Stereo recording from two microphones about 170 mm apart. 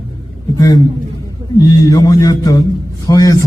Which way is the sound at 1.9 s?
20° left (ahead or behind).